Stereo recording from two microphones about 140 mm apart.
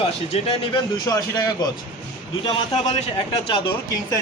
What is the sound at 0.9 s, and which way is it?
Speech, 30° left (ahead or behind).